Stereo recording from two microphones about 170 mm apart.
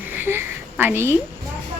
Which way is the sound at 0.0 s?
10° right (ahead or behind).